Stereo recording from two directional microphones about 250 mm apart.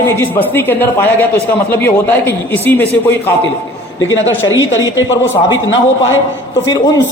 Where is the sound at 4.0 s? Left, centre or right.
Left.